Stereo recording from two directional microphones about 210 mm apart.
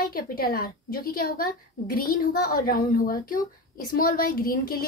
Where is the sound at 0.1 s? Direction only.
45° left (ahead or behind).